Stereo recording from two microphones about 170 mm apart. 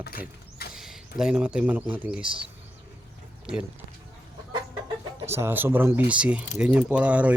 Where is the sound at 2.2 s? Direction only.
30° right (ahead or behind).